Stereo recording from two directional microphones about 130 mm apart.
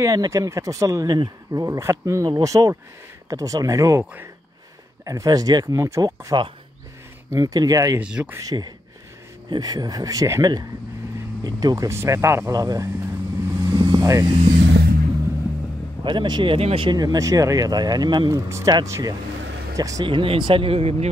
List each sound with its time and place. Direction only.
0.0 s speech: 25° right (ahead or behind)
4.0 s speech: 10° right (ahead or behind)
5.0 s speech: 25° right (ahead or behind)
8.0 s speech: 10° right (ahead or behind)
8.4 s speech: 30° right (ahead or behind)
16.0 s speech: 40° right (ahead or behind)
20.1 s speech: 40° right (ahead or behind)